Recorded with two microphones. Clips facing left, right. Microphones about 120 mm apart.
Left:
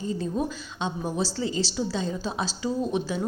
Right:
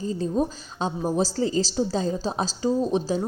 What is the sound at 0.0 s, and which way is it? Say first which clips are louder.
A woman's voice: right 3 dB; 35° right (ahead or behind).